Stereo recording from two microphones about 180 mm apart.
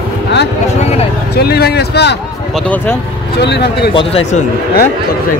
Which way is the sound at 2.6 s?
10° left (ahead or behind).